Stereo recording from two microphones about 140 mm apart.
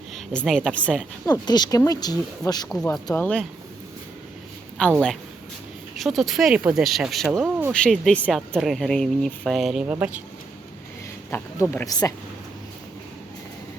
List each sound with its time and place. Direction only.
0.1 s a sound: 5° left (ahead or behind)
0.7 s speech: 10° left (ahead or behind)
1.3 s speech: 30° left (ahead or behind)
3.2 s speech: 10° left (ahead or behind)
4.8 s speech: 5° left (ahead or behind)
11.3 s speech: 15° left (ahead or behind)
11.9 s speech: 25° left (ahead or behind)